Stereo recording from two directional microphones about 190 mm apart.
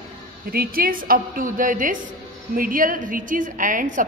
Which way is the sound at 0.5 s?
50° right (ahead or behind).